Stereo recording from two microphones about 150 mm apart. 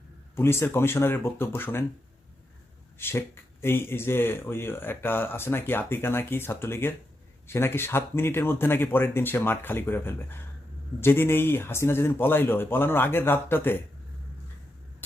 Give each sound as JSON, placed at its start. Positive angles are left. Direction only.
{"t": 0.3, "sound": "speech", "side_deg": 15}
{"t": 3.0, "sound": "speech", "side_deg": 15}